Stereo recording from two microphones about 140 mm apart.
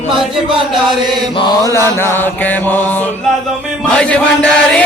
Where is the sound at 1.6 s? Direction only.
20° left (ahead or behind).